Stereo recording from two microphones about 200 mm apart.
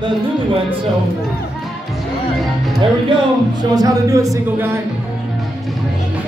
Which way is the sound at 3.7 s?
15° right (ahead or behind).